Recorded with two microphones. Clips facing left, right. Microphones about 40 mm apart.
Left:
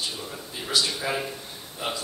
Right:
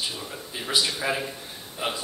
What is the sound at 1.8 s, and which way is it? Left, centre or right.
Speech, right.